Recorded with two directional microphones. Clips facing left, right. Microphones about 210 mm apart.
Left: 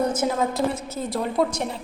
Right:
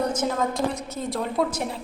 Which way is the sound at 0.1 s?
10° left (ahead or behind).